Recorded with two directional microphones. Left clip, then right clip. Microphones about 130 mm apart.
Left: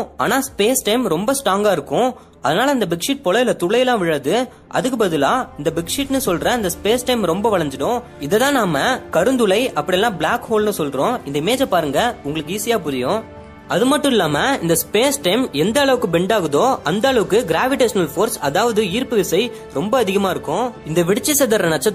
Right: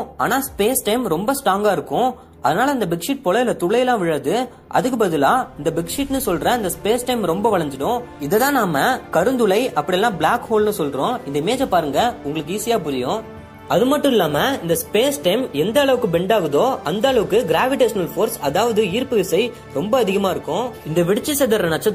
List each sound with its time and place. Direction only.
0.2 s speech: 25° left (ahead or behind)
1.9 s a man's voice: 50° left (ahead or behind)
2.4 s speech: 20° left (ahead or behind); by 21.9 s 35° left (ahead or behind)